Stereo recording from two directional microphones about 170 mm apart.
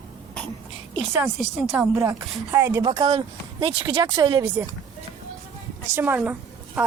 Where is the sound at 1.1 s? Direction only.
10° right (ahead or behind).